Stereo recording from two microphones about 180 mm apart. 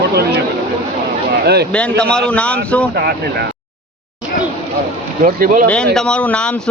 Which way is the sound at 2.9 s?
65° right (ahead or behind).